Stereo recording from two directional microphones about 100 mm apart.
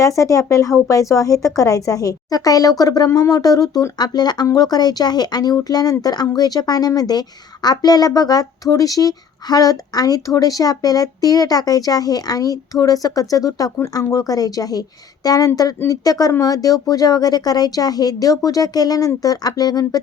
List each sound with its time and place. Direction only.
0.0 s a woman's voice: 35° left (ahead or behind)